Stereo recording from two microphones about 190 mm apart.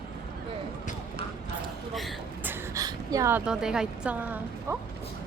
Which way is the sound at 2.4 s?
15° right (ahead or behind).